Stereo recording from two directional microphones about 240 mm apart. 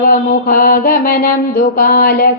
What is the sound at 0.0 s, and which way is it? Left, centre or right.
Mantra, left.